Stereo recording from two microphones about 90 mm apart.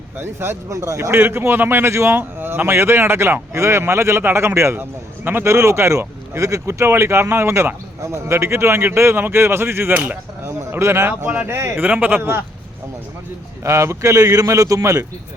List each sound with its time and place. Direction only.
0.2 s a man's voice: 25° right (ahead or behind)
13.7 s a man's voice: 30° right (ahead or behind)